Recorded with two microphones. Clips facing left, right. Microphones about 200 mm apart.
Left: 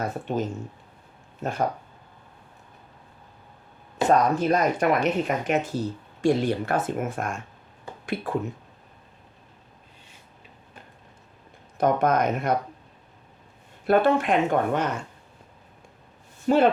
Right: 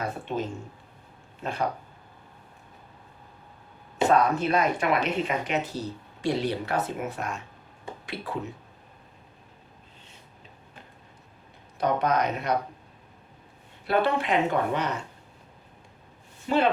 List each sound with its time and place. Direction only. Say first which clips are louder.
0.0 s speech: left 3 dB; 45° left (ahead or behind)
4.1 s speech: left 3 dB; 40° left (ahead or behind)
11.8 s speech: left 3 dB; 50° left (ahead or behind)
13.8 s speech: left 5 dB; 45° left (ahead or behind)
16.5 s speech: left 5 dB; 45° left (ahead or behind)